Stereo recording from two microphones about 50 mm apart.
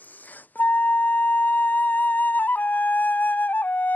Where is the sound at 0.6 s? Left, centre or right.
Left.